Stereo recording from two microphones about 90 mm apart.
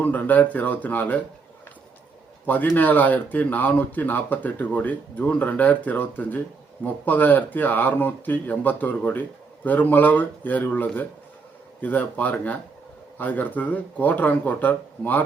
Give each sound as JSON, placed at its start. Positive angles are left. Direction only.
{"t": 0.0, "sound": "speech", "side_deg": 20}
{"t": 2.5, "sound": "speech", "side_deg": 20}